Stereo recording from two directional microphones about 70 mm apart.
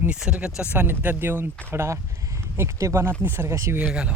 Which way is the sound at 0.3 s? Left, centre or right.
Centre.